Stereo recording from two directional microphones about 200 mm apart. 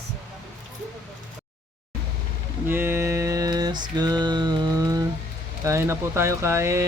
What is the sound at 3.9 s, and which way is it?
Mantra, 20° right (ahead or behind).